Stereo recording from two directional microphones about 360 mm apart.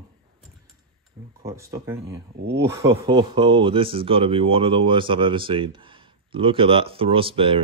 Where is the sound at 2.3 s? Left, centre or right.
Right.